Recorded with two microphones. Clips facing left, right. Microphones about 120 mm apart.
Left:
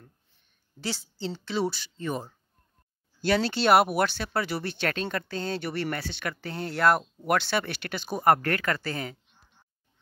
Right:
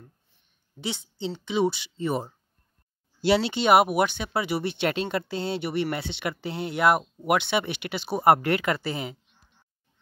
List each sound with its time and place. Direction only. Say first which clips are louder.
0.7 s a woman's voice: right 1 dB; 20° right (ahead or behind)
3.7 s speech: right 2 dB; 5° right (ahead or behind)
4.4 s speech: right 3 dB; 20° right (ahead or behind)
6.9 s speech: right 1 dB; 5° right (ahead or behind)
7.3 s speech: right 1 dB; 20° right (ahead or behind)